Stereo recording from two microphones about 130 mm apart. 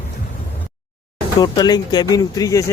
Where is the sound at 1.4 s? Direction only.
30° left (ahead or behind).